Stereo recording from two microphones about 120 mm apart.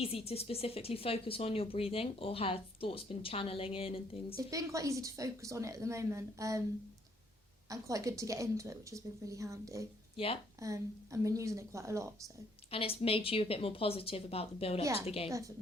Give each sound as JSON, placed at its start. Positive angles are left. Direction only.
{"t": 0.0, "sound": "speech", "side_deg": 55}
{"t": 4.4, "sound": "a woman's voice", "side_deg": -30}
{"t": 7.7, "sound": "a woman's voice", "side_deg": -30}
{"t": 12.7, "sound": "speech", "side_deg": 50}
{"t": 15.3, "sound": "a woman's voice", "side_deg": -25}